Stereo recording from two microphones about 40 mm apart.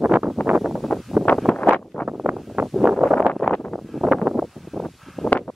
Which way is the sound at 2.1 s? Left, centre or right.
Right.